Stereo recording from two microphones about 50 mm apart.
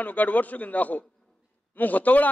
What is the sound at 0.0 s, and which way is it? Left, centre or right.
A man's voice, left.